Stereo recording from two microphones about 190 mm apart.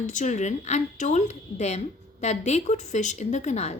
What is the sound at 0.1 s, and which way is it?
Speech, 40° left (ahead or behind).